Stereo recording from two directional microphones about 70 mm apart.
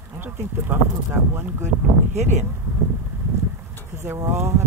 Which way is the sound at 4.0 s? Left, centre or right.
Right.